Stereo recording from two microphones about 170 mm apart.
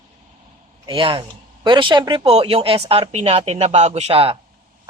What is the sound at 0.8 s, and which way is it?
Speech, 30° right (ahead or behind).